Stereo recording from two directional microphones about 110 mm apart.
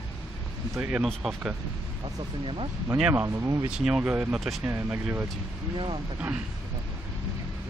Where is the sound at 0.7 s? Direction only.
15° right (ahead or behind).